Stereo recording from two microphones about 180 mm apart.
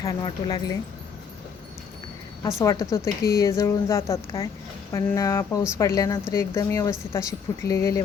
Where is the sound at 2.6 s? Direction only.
20° left (ahead or behind).